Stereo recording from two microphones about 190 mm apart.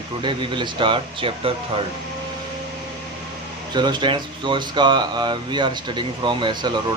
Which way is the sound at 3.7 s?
25° right (ahead or behind).